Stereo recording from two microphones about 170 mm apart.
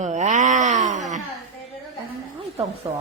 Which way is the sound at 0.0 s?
45° right (ahead or behind).